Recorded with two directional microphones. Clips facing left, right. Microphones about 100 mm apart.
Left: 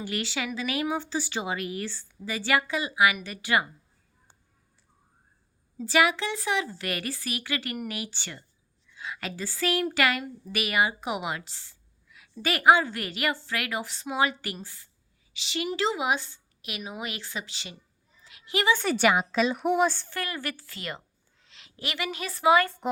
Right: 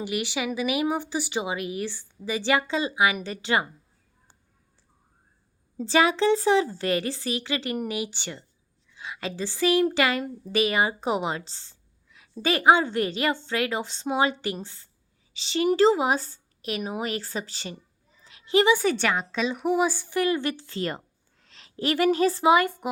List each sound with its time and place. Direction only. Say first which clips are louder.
0.0 s speech: right 3 dB; 15° right (ahead or behind)
5.8 s a woman's voice: right 3 dB; 30° right (ahead or behind)
18.3 s a sound: right 7 dB; 30° right (ahead or behind)
18.9 s a woman's voice: left 3 dB; 10° left (ahead or behind); by 22.9 s 15° right (ahead or behind)